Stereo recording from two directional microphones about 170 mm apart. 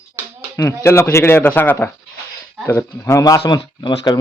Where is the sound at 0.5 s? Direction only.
15° left (ahead or behind).